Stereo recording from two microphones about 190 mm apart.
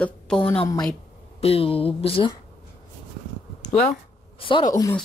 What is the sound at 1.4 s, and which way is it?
Speech, 30° left (ahead or behind).